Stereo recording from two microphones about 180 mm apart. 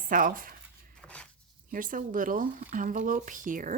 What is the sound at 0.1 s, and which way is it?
Speech, 50° right (ahead or behind).